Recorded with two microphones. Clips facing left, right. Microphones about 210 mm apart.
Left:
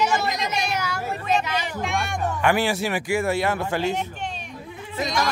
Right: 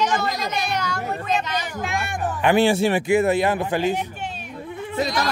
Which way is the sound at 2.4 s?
25° right (ahead or behind).